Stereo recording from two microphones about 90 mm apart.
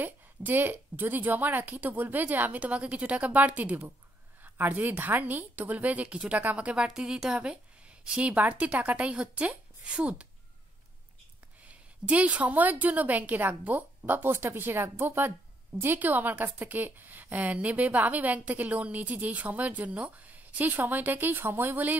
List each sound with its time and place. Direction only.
0.0 s a woman's voice: 20° right (ahead or behind)
11.6 s a woman's voice: 15° right (ahead or behind)